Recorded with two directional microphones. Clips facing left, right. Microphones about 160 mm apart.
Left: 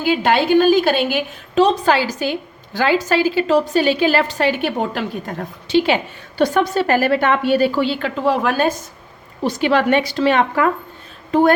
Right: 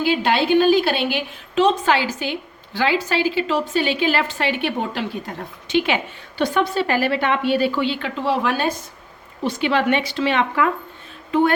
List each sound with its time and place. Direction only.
0.0 s a woman's voice: 50° left (ahead or behind)
5.6 s a woman's voice: 35° left (ahead or behind)